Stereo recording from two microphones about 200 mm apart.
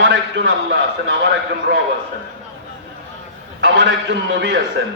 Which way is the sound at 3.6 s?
60° right (ahead or behind).